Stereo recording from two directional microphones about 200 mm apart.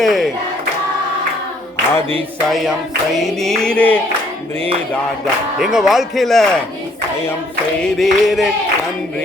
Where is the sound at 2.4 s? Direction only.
Centre (ahead or behind).